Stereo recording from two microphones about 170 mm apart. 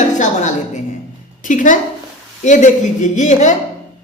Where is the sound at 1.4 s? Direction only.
50° left (ahead or behind).